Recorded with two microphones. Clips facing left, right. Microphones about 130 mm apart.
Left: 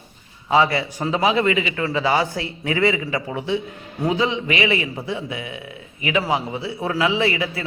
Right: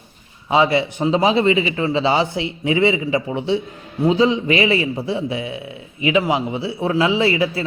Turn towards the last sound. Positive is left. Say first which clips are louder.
# right 4 dB
turn(degrees=-30)  # may be behind; listen again after turning